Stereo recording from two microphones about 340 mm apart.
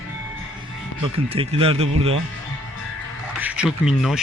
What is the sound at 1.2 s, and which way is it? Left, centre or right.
Speech, centre.